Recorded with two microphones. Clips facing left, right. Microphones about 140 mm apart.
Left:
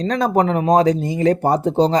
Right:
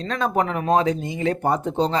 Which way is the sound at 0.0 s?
40° left (ahead or behind).